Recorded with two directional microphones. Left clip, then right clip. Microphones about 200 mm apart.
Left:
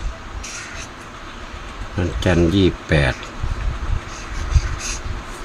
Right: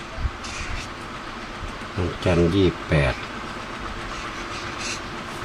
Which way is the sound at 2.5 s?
45° left (ahead or behind).